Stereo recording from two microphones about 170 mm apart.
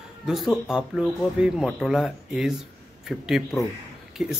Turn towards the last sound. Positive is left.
turn(degrees=0)  # may be behind; listen again after turning